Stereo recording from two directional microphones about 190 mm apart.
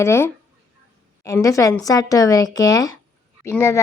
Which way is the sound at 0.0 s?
15° left (ahead or behind).